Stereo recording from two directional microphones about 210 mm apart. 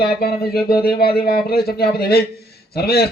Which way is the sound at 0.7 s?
50° left (ahead or behind).